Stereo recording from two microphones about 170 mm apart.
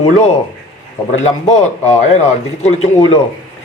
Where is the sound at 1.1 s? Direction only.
40° left (ahead or behind).